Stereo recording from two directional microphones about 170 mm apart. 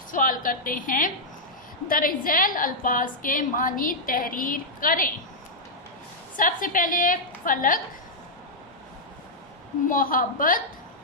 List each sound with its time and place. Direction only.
0.1 s a woman's voice: 55° left (ahead or behind)
6.3 s a woman's voice: 50° left (ahead or behind)
9.9 s a woman's voice: 55° left (ahead or behind)